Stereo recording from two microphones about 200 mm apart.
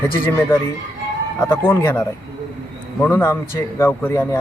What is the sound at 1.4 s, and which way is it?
A man's voice, 10° left (ahead or behind).